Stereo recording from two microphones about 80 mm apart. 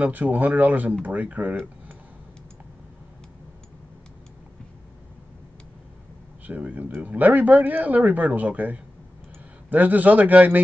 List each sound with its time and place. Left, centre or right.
0.0 s speech: right
6.4 s speech: right